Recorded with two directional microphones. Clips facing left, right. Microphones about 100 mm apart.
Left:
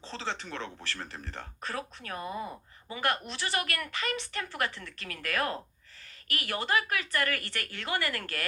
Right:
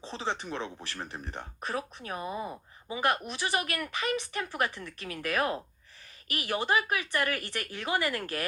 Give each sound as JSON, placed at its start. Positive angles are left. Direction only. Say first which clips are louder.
{"t": 0.0, "sound": "a woman's voice", "louder": "right 3 dB", "side_deg": -15}